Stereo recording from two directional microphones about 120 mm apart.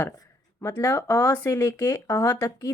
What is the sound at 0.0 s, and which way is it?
Speech, 25° left (ahead or behind).